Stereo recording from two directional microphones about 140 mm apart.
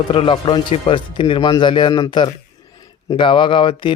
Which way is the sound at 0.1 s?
40° left (ahead or behind).